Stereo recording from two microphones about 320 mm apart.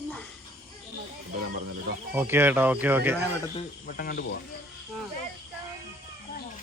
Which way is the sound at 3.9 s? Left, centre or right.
Left.